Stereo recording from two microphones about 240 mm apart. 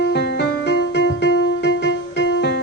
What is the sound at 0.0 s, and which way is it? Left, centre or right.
Music, left.